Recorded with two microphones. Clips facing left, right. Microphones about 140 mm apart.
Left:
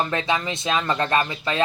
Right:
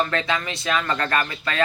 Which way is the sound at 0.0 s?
20° left (ahead or behind).